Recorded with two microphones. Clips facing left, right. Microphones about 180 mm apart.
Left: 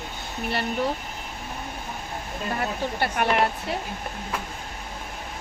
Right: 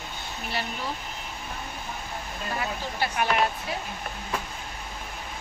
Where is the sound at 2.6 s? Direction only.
55° left (ahead or behind).